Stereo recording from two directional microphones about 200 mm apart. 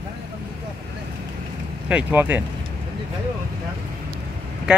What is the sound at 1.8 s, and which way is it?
Speech, 10° right (ahead or behind).